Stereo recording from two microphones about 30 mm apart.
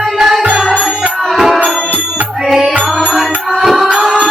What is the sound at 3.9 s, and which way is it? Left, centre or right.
Music, right.